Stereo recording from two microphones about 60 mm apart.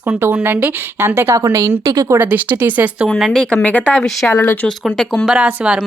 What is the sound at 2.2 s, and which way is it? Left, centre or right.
Speech, right.